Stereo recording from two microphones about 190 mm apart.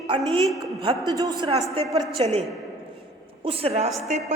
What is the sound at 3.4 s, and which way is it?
Speech, 30° right (ahead or behind).